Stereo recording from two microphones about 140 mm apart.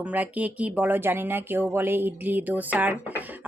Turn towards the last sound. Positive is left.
turn(degrees=-15)  # may be behind; listen again after turning